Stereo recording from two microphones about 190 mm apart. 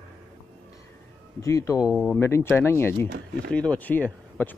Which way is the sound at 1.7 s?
Centre (ahead or behind).